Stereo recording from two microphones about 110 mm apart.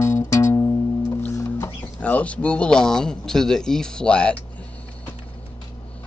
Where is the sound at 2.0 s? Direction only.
10° left (ahead or behind).